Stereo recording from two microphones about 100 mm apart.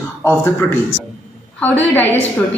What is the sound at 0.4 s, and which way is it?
A woman's voice, 20° left (ahead or behind).